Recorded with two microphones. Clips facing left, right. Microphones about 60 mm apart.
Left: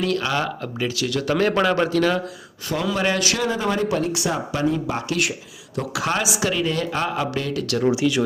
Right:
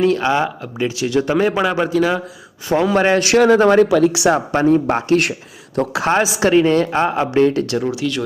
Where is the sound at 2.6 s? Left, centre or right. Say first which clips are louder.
Right 8 dB; right.